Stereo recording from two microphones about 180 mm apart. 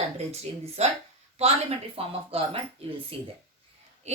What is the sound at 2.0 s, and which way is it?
Speech, 30° right (ahead or behind).